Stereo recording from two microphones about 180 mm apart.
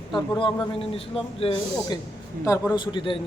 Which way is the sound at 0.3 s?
30° left (ahead or behind).